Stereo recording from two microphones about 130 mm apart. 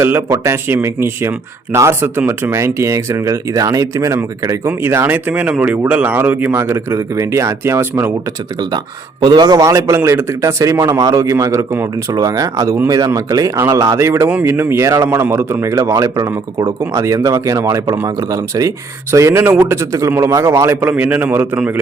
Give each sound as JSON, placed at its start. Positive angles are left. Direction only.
{"t": 0.0, "sound": "speech", "side_deg": -20}
{"t": 9.2, "sound": "a man's voice", "side_deg": -30}